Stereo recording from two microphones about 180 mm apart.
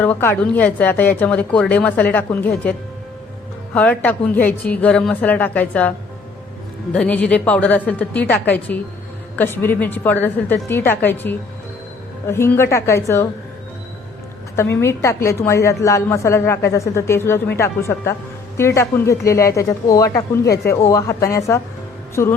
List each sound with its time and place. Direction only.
0.0 s a woman's voice: 10° left (ahead or behind)
3.8 s a woman's voice: 10° left (ahead or behind)
6.9 s a woman's voice: 5° left (ahead or behind)
14.5 s a woman's voice: 15° left (ahead or behind)
22.1 s music: 15° left (ahead or behind)